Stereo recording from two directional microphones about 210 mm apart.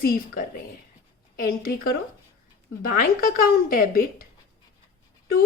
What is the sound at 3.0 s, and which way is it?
A woman's voice, 45° left (ahead or behind).